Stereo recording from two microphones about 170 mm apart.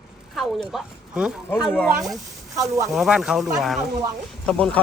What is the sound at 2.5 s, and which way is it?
Speech, 20° right (ahead or behind).